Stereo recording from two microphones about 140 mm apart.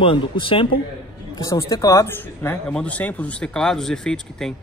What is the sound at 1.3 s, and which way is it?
Speech, 25° left (ahead or behind).